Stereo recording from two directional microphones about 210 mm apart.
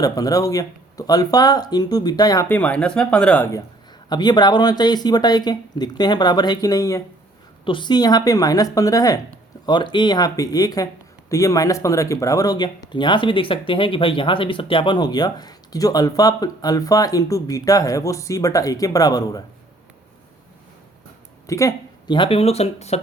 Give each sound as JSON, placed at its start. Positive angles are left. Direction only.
{"t": 0.0, "sound": "speech", "side_deg": 15}
{"t": 21.4, "sound": "speech", "side_deg": 15}